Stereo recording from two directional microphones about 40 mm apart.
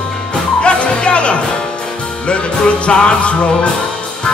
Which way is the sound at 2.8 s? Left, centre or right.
Left.